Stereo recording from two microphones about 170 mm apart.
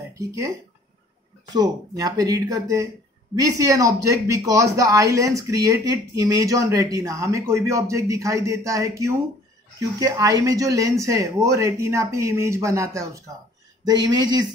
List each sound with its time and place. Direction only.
0.2 s speech: 20° right (ahead or behind)
1.5 s speech: 25° right (ahead or behind)